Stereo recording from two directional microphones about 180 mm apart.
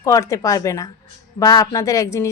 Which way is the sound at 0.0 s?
15° left (ahead or behind).